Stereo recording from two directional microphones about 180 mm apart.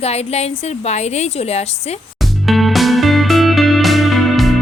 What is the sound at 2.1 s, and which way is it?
Music, centre (ahead or behind).